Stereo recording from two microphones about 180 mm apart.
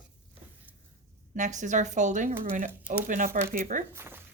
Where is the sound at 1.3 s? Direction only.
45° right (ahead or behind).